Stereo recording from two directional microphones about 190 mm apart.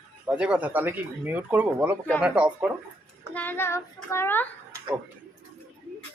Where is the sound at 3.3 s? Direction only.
10° left (ahead or behind).